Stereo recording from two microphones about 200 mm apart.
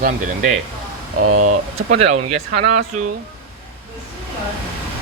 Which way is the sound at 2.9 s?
40° right (ahead or behind).